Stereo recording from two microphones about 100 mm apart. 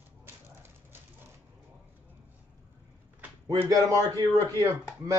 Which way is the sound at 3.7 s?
35° right (ahead or behind).